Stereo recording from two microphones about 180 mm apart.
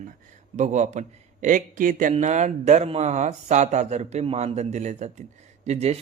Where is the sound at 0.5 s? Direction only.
40° right (ahead or behind).